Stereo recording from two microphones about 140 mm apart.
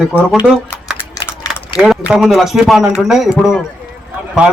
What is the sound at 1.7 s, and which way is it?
A man's voice, 5° right (ahead or behind).